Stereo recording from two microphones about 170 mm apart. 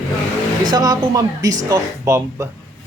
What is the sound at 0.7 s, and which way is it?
A woman's voice, 20° right (ahead or behind).